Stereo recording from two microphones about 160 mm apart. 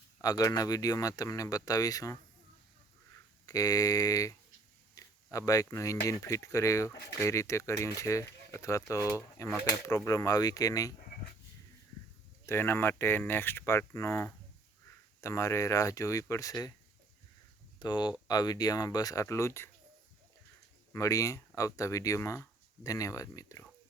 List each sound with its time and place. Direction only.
0.2 s speech: 20° left (ahead or behind)
3.4 s speech: 20° left (ahead or behind)
12.5 s speech: 15° left (ahead or behind)
17.7 s speech: 25° left (ahead or behind)
20.9 s speech: 20° left (ahead or behind)